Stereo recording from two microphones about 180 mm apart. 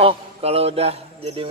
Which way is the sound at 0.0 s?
35° right (ahead or behind).